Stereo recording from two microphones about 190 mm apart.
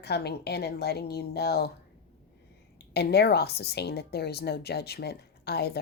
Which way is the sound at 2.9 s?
60° left (ahead or behind).